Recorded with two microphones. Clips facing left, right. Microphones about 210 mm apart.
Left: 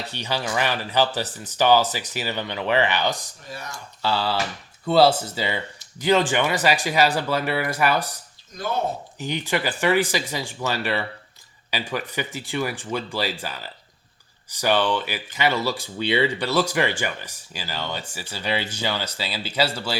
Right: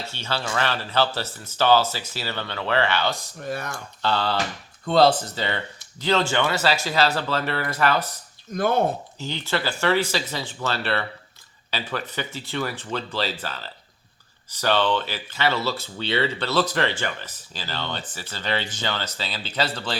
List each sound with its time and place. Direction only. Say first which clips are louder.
0.0 s speech: left 2 dB; 15° left (ahead or behind)
3.4 s speech: right 9 dB; 55° right (ahead or behind)
4.0 s speech: even; 5° left (ahead or behind)
8.5 s speech: right 5 dB; 55° right (ahead or behind)
9.1 s speech: left 2 dB; 15° left (ahead or behind)